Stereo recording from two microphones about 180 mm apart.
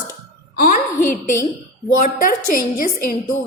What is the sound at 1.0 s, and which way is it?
A woman's voice, 45° left (ahead or behind).